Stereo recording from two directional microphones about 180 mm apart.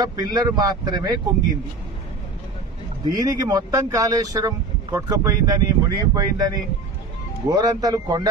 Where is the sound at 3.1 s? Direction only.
20° right (ahead or behind).